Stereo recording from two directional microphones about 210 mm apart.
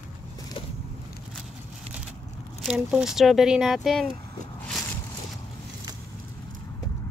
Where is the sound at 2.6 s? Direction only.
5° right (ahead or behind).